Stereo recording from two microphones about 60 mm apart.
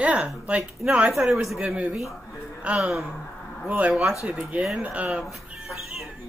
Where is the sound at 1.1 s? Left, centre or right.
Centre.